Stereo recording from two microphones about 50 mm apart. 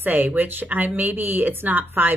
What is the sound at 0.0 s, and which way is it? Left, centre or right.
Speech, right.